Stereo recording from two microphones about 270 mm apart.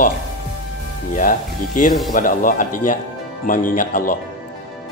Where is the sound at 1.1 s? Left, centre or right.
Left.